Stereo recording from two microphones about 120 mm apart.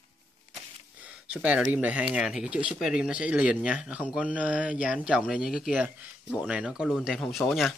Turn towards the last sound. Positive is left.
turn(degrees=0)  # may be behind; listen again after turning